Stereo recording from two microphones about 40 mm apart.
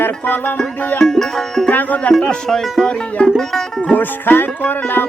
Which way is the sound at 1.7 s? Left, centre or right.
Left.